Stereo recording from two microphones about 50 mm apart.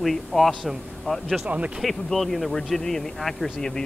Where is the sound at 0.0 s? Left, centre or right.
Centre.